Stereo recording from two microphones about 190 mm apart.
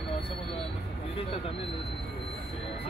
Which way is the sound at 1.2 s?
30° left (ahead or behind).